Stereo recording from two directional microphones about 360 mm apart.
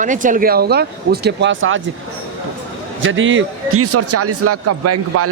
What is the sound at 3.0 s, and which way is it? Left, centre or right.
A man's voice, right.